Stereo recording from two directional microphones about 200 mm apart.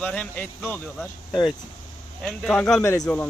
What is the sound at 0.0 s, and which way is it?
Speech, 5° left (ahead or behind).